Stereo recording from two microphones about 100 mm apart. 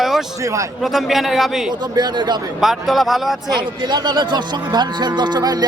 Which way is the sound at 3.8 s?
45° right (ahead or behind).